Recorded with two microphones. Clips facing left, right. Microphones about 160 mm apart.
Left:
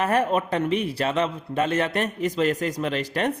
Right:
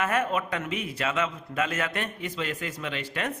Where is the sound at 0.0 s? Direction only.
35° left (ahead or behind).